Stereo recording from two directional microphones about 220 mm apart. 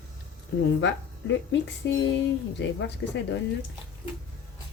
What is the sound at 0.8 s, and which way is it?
Speech, 55° left (ahead or behind).